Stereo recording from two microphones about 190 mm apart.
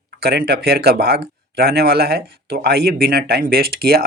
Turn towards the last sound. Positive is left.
turn(degrees=-55)  # may be behind; listen again after turning